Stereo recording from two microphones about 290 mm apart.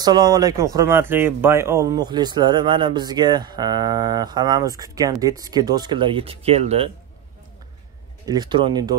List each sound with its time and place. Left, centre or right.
0.0 s speech: centre
8.3 s speech: centre